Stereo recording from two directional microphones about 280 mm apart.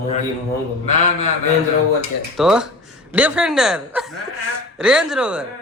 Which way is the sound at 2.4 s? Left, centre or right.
Centre.